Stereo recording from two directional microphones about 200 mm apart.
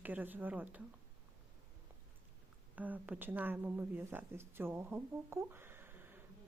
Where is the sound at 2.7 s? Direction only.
10° right (ahead or behind).